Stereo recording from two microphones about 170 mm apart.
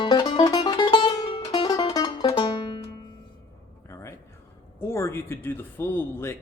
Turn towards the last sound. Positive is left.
turn(degrees=15)  # may be behind; listen again after turning